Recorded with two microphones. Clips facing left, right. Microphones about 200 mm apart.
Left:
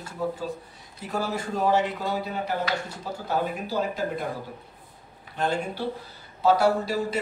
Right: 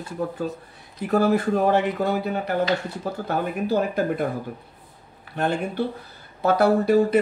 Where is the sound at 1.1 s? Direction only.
55° right (ahead or behind).